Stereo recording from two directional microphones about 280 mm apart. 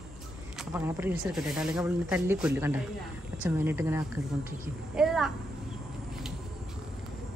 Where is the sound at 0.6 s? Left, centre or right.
Centre.